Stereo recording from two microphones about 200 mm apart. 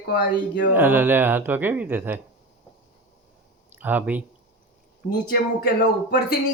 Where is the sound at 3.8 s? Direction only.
10° right (ahead or behind).